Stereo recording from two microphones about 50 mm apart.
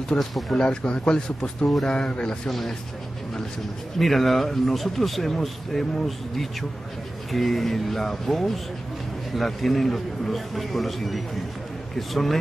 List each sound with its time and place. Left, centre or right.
0.2 s a man's voice: centre
0.6 s speech: centre
4.0 s a man's voice: centre